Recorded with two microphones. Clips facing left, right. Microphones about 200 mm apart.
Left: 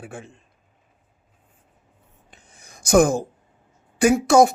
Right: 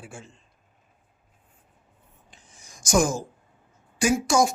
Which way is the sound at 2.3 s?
60° left (ahead or behind).